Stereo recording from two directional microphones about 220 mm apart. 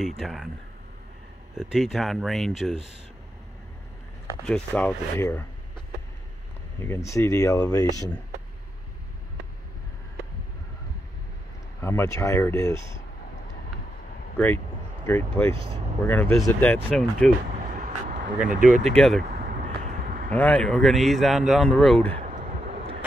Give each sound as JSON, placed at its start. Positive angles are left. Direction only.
{"t": 0.2, "sound": "speech", "side_deg": 0}
{"t": 1.6, "sound": "speech", "side_deg": 0}
{"t": 4.5, "sound": "speech", "side_deg": 5}
{"t": 7.1, "sound": "speech", "side_deg": 15}
{"t": 11.8, "sound": "speech", "side_deg": 10}
{"t": 15.0, "sound": "speech", "side_deg": 10}
{"t": 15.5, "sound": "speech", "side_deg": -25}
{"t": 16.1, "sound": "speech", "side_deg": 10}
{"t": 17.7, "sound": "vehicle", "side_deg": -45}
{"t": 18.5, "sound": "speech", "side_deg": -35}
{"t": 18.9, "sound": "speech", "side_deg": 0}
{"t": 19.6, "sound": "vehicle", "side_deg": -35}
{"t": 20.2, "sound": "speech", "side_deg": 5}